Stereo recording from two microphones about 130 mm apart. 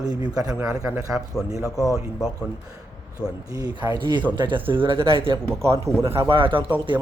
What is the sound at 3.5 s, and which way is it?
A man's voice, 30° right (ahead or behind).